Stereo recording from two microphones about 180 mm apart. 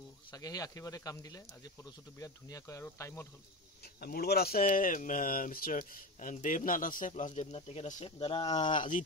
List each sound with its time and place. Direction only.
0.3 s speech: 20° left (ahead or behind)
3.8 s speech: 60° left (ahead or behind); by 8.7 s 25° left (ahead or behind)
8.7 s speech: 45° left (ahead or behind)